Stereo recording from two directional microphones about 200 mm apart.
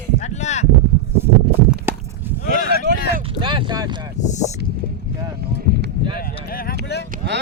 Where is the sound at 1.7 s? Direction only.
10° right (ahead or behind).